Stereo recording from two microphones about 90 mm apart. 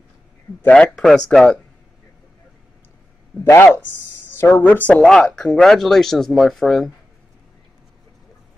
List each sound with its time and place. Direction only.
0.7 s speech: 5° left (ahead or behind)
3.4 s speech: 30° left (ahead or behind)
5.0 s speech: 5° left (ahead or behind)